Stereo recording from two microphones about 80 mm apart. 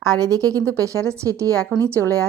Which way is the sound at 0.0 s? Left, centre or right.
Right.